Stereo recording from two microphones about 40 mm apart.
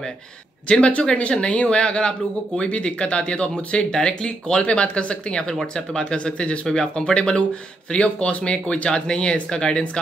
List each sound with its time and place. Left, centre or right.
0.7 s speech: left
6.7 s speech: centre